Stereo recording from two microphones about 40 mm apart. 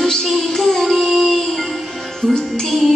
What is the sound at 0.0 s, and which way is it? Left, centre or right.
Child singing, centre.